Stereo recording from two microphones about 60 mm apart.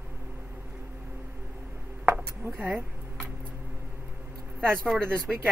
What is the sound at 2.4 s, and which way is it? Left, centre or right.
Speech, right.